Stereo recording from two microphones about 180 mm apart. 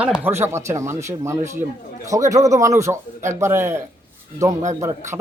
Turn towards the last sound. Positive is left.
turn(degrees=-15)  # may be behind; listen again after turning